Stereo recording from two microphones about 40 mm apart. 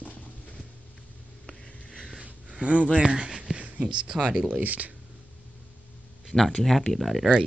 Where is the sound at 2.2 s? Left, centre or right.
Right.